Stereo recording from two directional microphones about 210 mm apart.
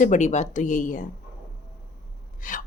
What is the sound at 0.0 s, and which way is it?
Speech, 35° left (ahead or behind).